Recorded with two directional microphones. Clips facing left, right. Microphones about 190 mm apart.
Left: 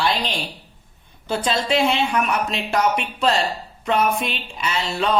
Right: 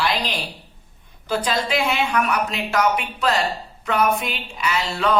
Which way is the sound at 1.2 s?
25° left (ahead or behind).